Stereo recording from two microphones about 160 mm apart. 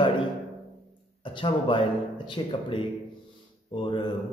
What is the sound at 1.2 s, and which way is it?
A man's voice, 30° left (ahead or behind).